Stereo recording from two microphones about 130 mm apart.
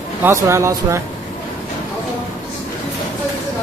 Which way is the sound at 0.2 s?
20° right (ahead or behind).